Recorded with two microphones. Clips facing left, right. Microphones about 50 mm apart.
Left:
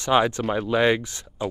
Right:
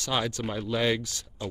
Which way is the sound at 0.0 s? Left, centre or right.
Left.